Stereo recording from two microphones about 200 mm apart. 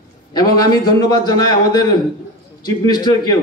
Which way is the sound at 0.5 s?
20° left (ahead or behind).